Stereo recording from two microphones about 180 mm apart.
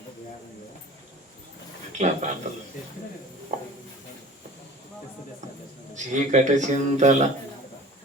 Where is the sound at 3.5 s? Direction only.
45° right (ahead or behind).